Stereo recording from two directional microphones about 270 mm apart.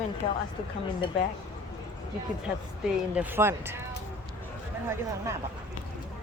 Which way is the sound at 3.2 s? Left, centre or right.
Centre.